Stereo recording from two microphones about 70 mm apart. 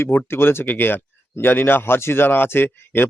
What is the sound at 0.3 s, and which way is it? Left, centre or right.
Speech, left.